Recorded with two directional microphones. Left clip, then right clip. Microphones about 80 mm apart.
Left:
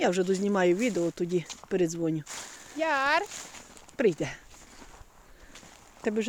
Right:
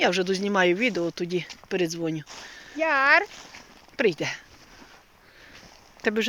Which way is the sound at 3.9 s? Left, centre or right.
Left.